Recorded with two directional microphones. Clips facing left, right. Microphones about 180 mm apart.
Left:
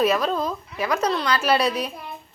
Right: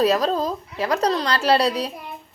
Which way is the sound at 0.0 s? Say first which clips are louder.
Right 2 dB; 35° right (ahead or behind).